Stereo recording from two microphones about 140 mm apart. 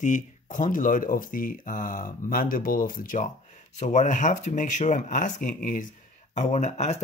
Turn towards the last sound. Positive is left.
turn(degrees=55)  # may be behind; listen again after turning